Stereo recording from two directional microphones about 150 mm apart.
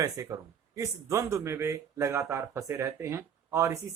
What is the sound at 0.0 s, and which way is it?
Speech, 25° right (ahead or behind).